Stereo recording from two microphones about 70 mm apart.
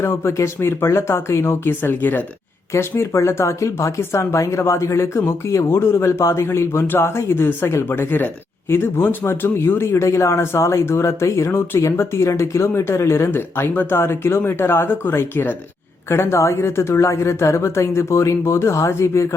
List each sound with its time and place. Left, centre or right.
0.0 s speech: left
2.7 s speech: left